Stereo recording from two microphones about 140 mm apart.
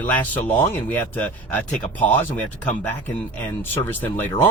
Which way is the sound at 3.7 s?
15° left (ahead or behind).